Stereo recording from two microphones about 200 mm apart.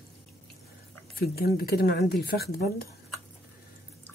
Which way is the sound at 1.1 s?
50° left (ahead or behind).